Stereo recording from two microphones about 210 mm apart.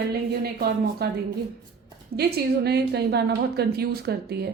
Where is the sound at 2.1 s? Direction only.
50° right (ahead or behind).